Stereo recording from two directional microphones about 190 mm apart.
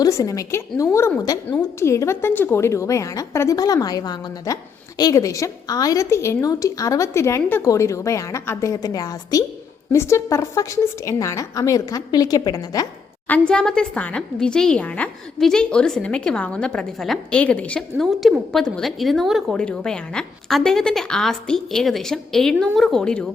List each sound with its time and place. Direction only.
0.0 s a woman's voice: 20° left (ahead or behind)
13.3 s a woman's voice: 5° left (ahead or behind)